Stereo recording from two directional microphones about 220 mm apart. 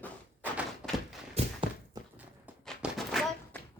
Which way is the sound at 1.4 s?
30° right (ahead or behind).